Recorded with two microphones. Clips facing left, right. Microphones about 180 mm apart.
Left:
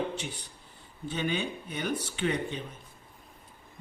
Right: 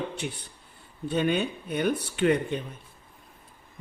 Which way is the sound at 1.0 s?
55° right (ahead or behind).